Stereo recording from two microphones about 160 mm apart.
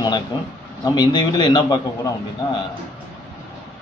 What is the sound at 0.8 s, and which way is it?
Speech, 25° left (ahead or behind).